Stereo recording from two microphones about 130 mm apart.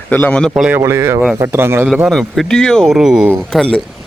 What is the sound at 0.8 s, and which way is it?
Speech, 20° right (ahead or behind).